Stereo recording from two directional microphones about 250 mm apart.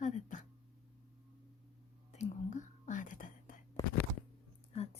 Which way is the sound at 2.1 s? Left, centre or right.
Left.